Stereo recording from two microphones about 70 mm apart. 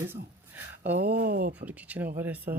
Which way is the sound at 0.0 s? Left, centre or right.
Right.